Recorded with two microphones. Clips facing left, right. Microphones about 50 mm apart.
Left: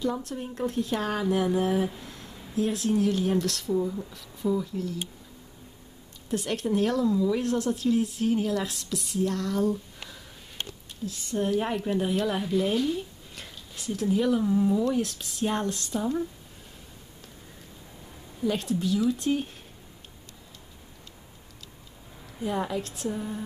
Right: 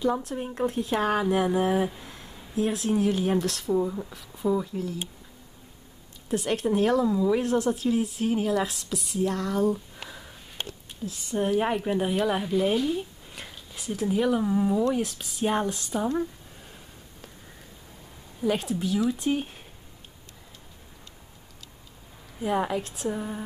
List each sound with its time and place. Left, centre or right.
0.0 s speech: centre
1.9 s a sound: centre
2.5 s speech: centre
6.3 s a woman's voice: centre
18.4 s speech: centre
22.4 s speech: right